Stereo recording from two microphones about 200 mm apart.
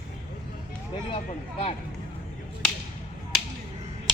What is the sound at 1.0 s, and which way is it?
Speech, 30° left (ahead or behind).